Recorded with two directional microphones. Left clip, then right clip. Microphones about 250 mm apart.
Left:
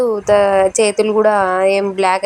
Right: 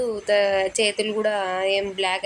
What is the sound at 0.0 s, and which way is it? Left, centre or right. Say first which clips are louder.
A woman's voice: left 8 dB; left.